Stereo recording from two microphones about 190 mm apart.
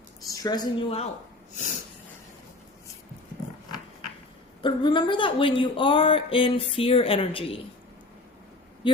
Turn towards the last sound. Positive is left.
turn(degrees=30)  # may be behind; listen again after turning